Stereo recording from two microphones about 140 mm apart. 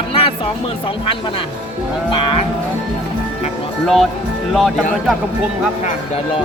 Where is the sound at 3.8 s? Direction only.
Centre (ahead or behind).